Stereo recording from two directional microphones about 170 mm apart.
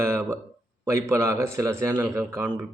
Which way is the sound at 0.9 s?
15° right (ahead or behind).